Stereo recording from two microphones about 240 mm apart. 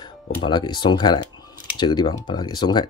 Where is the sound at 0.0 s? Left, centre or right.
Centre.